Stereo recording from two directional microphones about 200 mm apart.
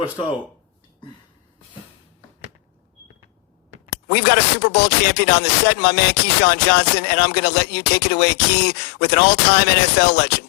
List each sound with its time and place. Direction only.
4.1 s speech: 55° left (ahead or behind)